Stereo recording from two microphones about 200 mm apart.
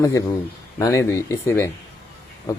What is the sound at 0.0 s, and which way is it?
Speech, 15° left (ahead or behind).